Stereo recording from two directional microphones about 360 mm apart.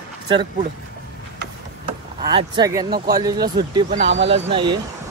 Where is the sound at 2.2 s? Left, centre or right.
Centre.